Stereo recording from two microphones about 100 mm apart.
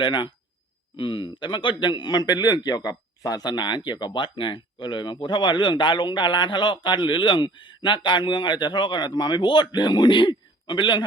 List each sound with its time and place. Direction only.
0.0 s a man's voice: 50° left (ahead or behind)